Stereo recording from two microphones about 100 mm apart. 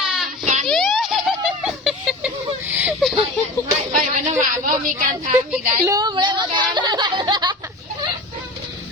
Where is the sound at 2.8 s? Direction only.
5° right (ahead or behind).